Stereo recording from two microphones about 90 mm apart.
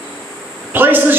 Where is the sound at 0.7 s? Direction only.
20° right (ahead or behind).